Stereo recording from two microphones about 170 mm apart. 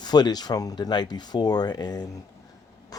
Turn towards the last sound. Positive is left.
turn(degrees=20)  # may be behind; listen again after turning